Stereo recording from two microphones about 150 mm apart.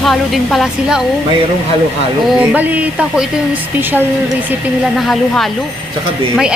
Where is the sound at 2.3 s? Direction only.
10° right (ahead or behind).